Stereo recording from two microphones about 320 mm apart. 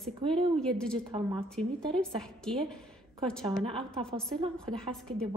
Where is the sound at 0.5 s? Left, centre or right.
Centre.